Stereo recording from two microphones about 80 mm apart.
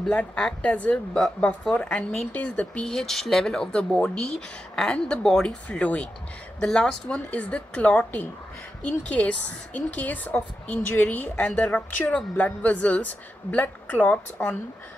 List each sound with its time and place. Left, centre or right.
0.1 s speech: centre